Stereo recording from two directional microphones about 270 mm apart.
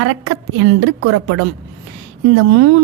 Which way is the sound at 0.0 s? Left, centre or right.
Right.